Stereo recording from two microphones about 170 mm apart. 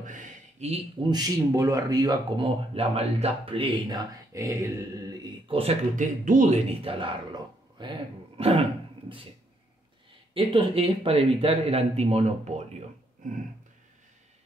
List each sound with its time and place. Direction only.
0.0 s a sound: 50° right (ahead or behind)
1.0 s speech: 25° right (ahead or behind)
4.3 s a sound: 20° right (ahead or behind)
5.2 s speech: 35° right (ahead or behind)
6.7 s a man's voice: 35° right (ahead or behind)
10.3 s a man's voice: 35° right (ahead or behind)